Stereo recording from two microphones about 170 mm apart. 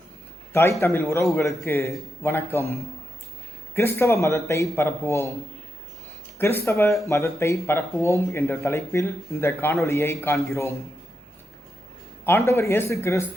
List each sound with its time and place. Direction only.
0.5 s speech: 15° left (ahead or behind)
6.4 s speech: 15° left (ahead or behind)
12.2 s speech: 15° left (ahead or behind)